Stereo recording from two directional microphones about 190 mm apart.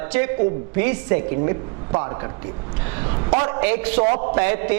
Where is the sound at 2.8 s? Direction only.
15° right (ahead or behind).